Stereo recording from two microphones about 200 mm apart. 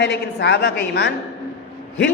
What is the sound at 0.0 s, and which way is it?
Speech, 60° left (ahead or behind).